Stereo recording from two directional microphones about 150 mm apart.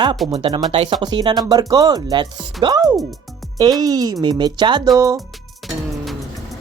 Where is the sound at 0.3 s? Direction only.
35° right (ahead or behind); by 5.2 s 20° right (ahead or behind).